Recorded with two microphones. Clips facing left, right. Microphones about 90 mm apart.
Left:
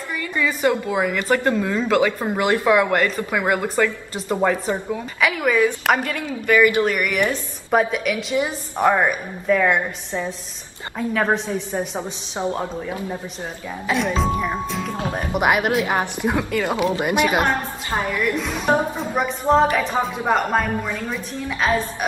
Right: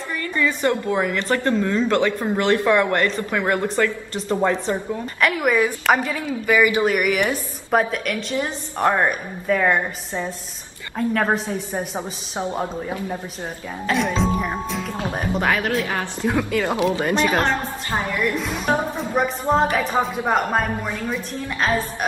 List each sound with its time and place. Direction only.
0.2 s a woman's voice: 10° left (ahead or behind)
8.9 s a woman's voice: centre (ahead or behind)
12.0 s a woman's voice: 15° right (ahead or behind)
13.8 s a woman's voice: centre (ahead or behind)
15.3 s a woman's voice: 15° left (ahead or behind)
16.3 s a woman's voice: centre (ahead or behind)
16.7 s speech: 20° right (ahead or behind)
17.0 s a woman's voice: 10° left (ahead or behind)
18.4 s a woman's voice: centre (ahead or behind)